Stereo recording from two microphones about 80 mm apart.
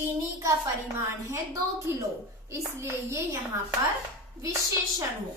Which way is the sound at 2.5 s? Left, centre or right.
Right.